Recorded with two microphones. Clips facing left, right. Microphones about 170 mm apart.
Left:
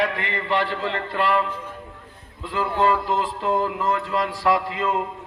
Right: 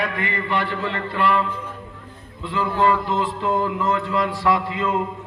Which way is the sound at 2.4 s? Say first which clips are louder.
Right 1 dB; 40° left (ahead or behind).